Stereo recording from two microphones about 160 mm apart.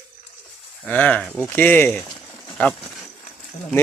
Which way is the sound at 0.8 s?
10° left (ahead or behind).